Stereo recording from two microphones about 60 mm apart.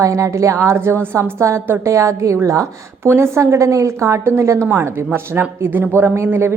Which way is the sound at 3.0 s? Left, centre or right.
Right.